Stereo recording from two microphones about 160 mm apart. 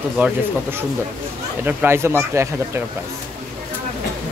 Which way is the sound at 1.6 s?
15° right (ahead or behind).